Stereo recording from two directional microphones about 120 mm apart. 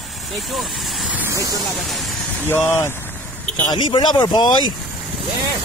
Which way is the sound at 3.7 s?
40° left (ahead or behind).